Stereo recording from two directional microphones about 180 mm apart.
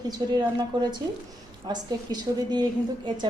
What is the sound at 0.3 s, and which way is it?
A woman's voice, 25° right (ahead or behind).